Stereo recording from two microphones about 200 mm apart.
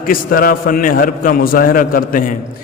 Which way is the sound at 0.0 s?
45° left (ahead or behind).